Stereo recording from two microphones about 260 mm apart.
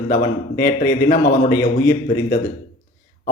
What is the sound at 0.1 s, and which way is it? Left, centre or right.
A man's voice, left.